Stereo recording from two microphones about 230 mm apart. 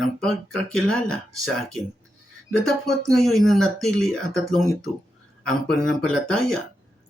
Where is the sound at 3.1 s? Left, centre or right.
Centre.